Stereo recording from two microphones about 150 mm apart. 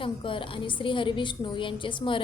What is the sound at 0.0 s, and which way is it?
A woman's voice, 35° left (ahead or behind).